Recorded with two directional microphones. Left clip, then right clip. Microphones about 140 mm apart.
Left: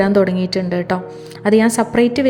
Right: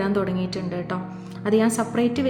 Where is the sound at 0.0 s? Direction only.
50° left (ahead or behind).